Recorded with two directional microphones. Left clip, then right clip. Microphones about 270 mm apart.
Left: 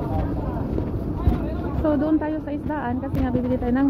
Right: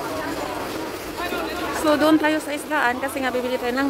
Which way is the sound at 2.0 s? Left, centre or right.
Right.